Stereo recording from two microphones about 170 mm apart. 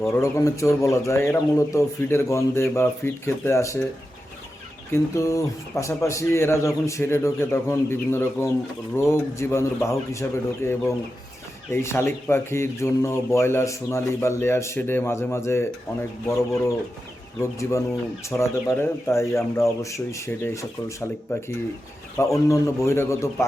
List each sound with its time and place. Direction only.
0.1 s speech: 20° left (ahead or behind)
4.9 s speech: 15° left (ahead or behind)